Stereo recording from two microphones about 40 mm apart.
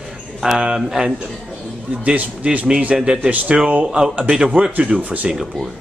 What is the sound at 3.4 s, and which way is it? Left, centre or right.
Speech, right.